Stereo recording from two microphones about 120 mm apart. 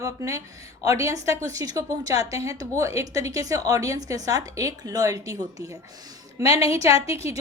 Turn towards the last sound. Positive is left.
turn(degrees=-25)  # may be behind; listen again after turning